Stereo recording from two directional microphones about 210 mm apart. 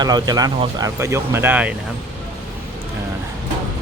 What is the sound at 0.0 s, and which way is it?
Speech, 20° right (ahead or behind).